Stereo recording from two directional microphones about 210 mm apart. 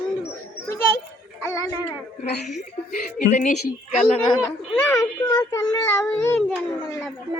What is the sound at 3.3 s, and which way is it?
Speech, 35° left (ahead or behind).